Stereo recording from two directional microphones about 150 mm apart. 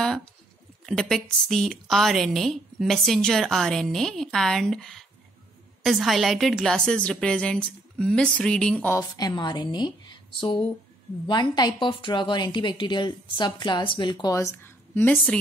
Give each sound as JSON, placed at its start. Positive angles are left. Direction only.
{"t": 0.0, "sound": "a woman's voice", "side_deg": 5}
{"t": 8.9, "sound": "a woman's voice", "side_deg": 25}